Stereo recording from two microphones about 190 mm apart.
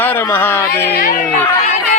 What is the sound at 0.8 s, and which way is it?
Speech, 50° left (ahead or behind).